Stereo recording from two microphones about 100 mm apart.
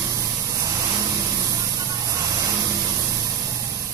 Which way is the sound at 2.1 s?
35° right (ahead or behind).